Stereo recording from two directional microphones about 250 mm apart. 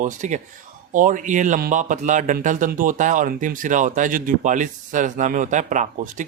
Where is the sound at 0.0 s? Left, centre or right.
Right.